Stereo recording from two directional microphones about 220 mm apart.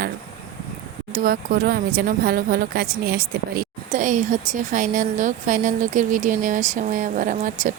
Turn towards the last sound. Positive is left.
turn(degrees=-35)  # may be behind; listen again after turning